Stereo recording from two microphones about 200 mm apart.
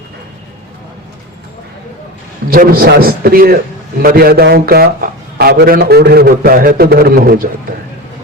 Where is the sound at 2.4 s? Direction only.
45° right (ahead or behind).